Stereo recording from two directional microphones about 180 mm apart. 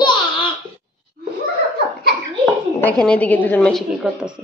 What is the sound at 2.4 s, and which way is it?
A woman's voice, 10° left (ahead or behind).